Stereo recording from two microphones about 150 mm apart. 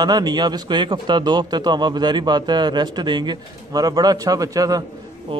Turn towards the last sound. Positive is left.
turn(degrees=-25)  # may be behind; listen again after turning